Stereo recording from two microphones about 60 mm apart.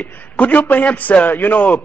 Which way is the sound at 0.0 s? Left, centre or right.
Left.